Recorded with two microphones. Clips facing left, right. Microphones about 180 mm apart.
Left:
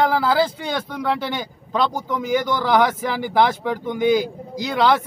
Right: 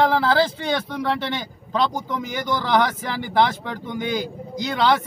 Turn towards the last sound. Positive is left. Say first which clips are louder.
# left 2 dB
turn(degrees=5)  # may be behind; listen again after turning